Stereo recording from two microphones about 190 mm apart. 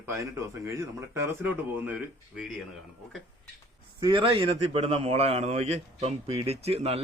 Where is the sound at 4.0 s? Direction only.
25° right (ahead or behind).